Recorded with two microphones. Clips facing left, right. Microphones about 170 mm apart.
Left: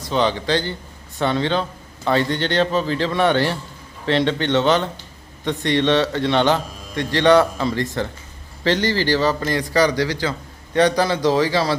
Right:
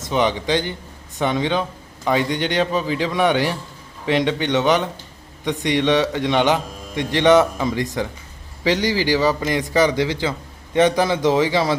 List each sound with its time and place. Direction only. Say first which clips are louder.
0.0 s a man's voice: even; 15° right (ahead or behind)